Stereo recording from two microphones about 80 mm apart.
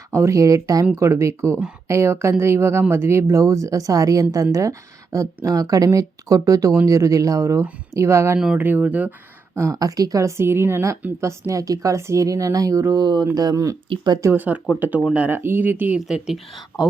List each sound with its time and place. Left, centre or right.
0.1 s a woman's voice: right
8.5 s speech: right
9.6 s a woman's voice: right
13.0 s speech: right
13.2 s speech: right
13.9 s speech: right
14.3 s speech: centre
16.0 s speech: centre